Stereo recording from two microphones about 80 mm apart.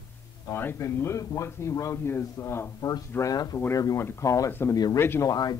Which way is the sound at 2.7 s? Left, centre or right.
Left.